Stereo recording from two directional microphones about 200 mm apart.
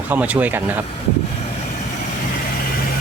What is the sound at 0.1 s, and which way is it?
Speech, 5° right (ahead or behind).